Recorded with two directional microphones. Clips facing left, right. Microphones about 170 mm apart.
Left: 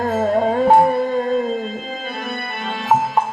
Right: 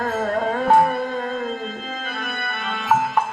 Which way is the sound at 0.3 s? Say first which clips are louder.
Left 5 dB; 25° left (ahead or behind).